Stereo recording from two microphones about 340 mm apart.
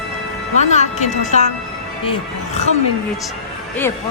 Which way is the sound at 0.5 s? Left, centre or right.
Left.